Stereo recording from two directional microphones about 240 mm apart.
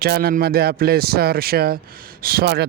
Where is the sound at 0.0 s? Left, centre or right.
Right.